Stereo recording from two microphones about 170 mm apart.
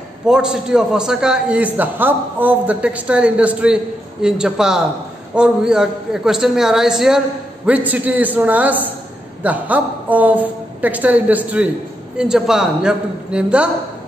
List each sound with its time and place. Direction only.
0.3 s a man's voice: 5° right (ahead or behind)